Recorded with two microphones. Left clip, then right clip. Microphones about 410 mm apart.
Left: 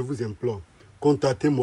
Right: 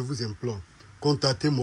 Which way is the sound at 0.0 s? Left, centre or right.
Centre.